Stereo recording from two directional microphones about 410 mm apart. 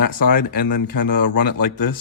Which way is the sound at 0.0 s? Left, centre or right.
Left.